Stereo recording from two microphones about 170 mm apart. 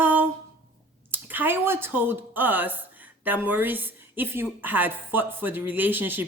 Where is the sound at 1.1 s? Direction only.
10° right (ahead or behind).